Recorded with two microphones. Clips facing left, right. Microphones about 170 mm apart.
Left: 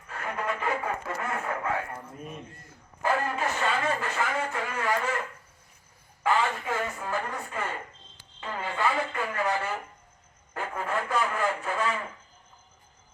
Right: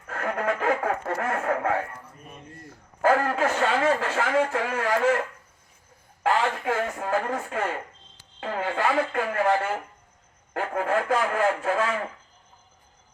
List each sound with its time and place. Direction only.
0.1 s a sound: 65° right (ahead or behind)
1.3 s speech: 55° right (ahead or behind)
3.0 s a man's voice: 85° right
6.2 s speech: 70° right (ahead or behind)
8.4 s speech: 65° right (ahead or behind)
10.5 s speech: 70° right (ahead or behind)